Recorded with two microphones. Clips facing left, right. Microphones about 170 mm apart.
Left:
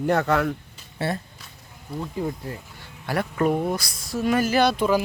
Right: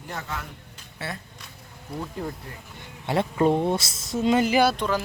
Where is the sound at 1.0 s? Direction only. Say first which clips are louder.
Left 8 dB; 35° left (ahead or behind).